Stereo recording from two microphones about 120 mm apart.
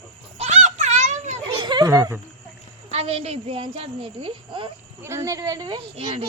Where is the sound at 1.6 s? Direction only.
40° right (ahead or behind).